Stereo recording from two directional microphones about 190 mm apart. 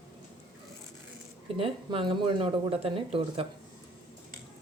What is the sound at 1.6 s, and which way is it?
Speech, 30° right (ahead or behind).